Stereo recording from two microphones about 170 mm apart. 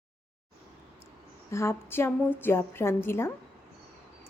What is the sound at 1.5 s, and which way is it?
A woman's voice, 15° left (ahead or behind).